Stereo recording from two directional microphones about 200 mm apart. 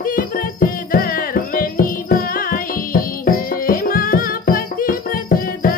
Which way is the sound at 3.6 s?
45° left (ahead or behind).